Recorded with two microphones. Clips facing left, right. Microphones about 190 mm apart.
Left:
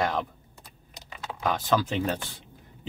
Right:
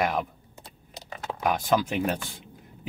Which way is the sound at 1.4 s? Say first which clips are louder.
Right 1 dB; 15° right (ahead or behind).